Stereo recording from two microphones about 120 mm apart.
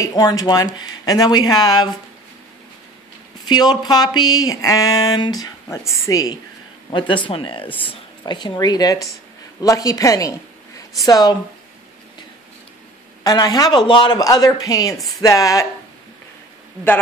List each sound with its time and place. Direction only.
0.0 s speech: 30° left (ahead or behind)
3.4 s speech: 35° left (ahead or behind)
6.9 s a woman's voice: 40° left (ahead or behind)
13.2 s speech: 35° left (ahead or behind)
15.0 s speech: centre (ahead or behind)
15.2 s a woman's voice: 30° left (ahead or behind)